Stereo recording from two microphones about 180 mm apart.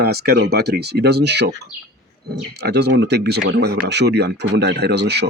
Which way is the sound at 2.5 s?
65° right (ahead or behind).